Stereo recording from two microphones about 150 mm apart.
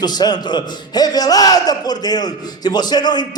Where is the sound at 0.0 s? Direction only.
25° left (ahead or behind).